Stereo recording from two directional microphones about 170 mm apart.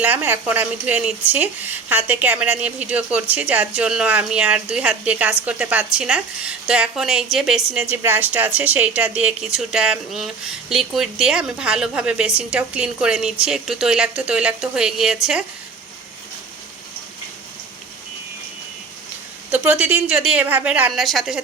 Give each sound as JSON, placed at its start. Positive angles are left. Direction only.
{"t": 0.0, "sound": "a woman's voice", "side_deg": -10}
{"t": 19.5, "sound": "a woman's voice", "side_deg": -10}